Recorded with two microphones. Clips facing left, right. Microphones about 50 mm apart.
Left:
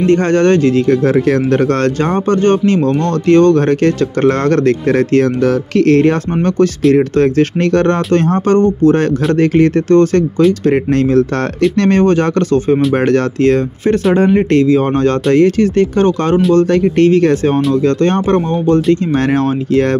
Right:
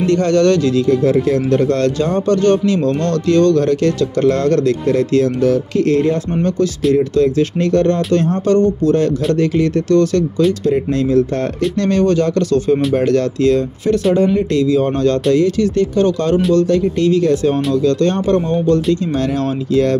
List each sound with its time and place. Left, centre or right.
0.0 s speech: left
0.8 s speech: left
10.6 s speech: left
12.0 s speech: left